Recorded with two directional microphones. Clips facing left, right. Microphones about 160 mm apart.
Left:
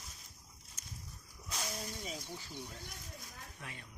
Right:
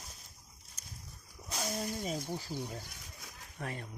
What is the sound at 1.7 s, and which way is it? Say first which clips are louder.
Speech: right 7 dB; 50° right (ahead or behind).